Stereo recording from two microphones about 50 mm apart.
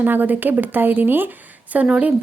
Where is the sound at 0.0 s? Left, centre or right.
Right.